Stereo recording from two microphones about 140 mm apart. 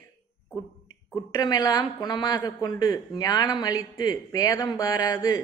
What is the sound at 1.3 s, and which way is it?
A man's voice, 25° left (ahead or behind).